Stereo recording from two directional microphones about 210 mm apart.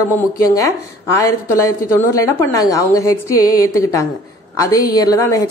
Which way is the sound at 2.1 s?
15° left (ahead or behind).